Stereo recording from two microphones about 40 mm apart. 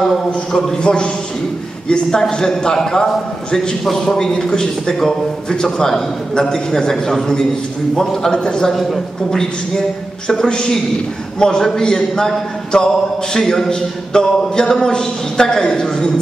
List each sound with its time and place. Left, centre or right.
0.0 s a man's voice: centre
0.8 s a man's voice: left